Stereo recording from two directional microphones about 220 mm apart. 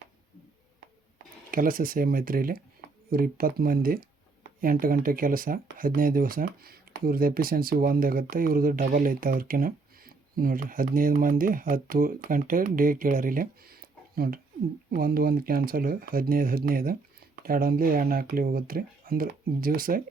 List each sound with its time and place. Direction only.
1.5 s speech: 40° right (ahead or behind)
14.8 s speech: 40° right (ahead or behind)